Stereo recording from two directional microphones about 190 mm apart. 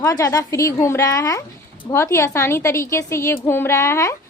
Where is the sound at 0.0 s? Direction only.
15° left (ahead or behind).